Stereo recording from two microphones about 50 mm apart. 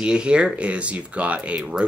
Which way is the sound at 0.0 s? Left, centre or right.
Centre.